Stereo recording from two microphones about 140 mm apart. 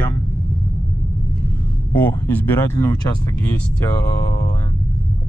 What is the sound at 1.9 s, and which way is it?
Speech, 15° left (ahead or behind).